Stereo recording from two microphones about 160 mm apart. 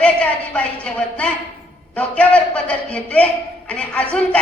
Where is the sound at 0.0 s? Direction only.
5° left (ahead or behind).